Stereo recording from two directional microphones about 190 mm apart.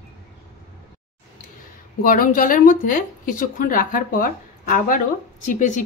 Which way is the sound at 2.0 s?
45° left (ahead or behind).